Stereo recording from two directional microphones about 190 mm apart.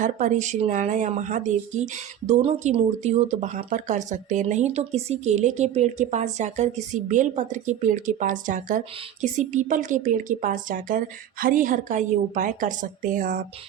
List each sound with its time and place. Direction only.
0.0 s a woman's voice: 40° right (ahead or behind)